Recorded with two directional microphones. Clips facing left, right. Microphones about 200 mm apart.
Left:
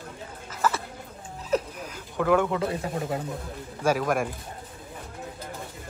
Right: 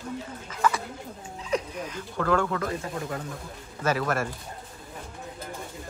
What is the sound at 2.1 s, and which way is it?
Speech, 15° left (ahead or behind).